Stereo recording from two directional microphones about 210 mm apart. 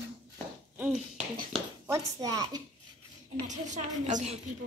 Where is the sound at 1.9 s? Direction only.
15° right (ahead or behind).